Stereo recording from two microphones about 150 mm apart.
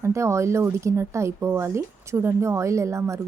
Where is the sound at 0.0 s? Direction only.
20° right (ahead or behind).